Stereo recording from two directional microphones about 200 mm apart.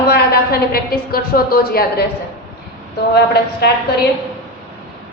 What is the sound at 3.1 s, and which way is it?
Speech, 55° left (ahead or behind).